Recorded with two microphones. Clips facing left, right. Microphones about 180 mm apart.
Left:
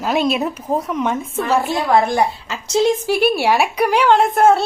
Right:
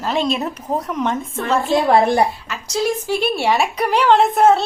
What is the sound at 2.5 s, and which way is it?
Speech, 25° left (ahead or behind).